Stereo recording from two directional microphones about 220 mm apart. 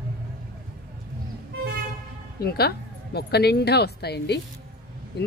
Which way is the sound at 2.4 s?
45° left (ahead or behind).